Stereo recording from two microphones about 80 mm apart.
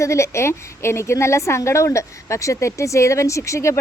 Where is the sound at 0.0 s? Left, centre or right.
Left.